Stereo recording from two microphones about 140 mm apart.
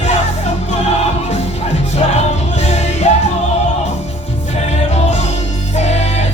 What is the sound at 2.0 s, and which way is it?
Music, 55° left (ahead or behind).